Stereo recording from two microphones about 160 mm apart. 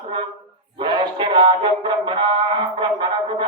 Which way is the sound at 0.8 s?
30° right (ahead or behind).